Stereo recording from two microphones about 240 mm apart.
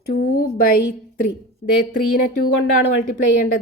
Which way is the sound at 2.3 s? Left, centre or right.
Left.